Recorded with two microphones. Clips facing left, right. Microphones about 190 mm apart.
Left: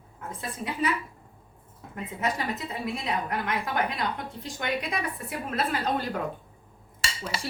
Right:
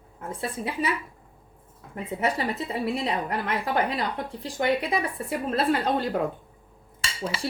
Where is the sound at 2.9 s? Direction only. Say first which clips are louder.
Right 3 dB; 30° right (ahead or behind).